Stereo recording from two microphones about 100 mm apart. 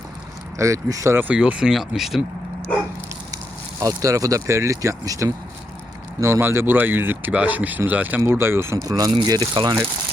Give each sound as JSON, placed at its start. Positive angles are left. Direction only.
{"t": 0.6, "sound": "speech", "side_deg": -35}
{"t": 1.1, "sound": "speech", "side_deg": -15}
{"t": 3.3, "sound": "speech", "side_deg": -35}